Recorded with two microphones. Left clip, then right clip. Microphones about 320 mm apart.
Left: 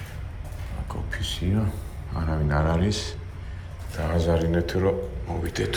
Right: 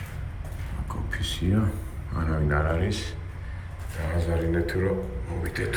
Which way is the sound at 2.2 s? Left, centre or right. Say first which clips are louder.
Left 1 dB; centre.